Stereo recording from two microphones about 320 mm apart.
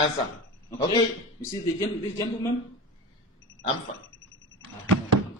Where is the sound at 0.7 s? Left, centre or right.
Centre.